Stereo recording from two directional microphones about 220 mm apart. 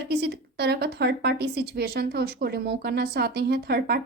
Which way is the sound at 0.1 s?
45° right (ahead or behind).